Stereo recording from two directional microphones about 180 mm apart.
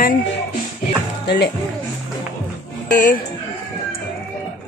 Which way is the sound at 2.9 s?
45° left (ahead or behind).